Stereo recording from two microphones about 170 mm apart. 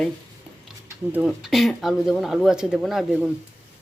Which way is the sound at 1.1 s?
Centre (ahead or behind).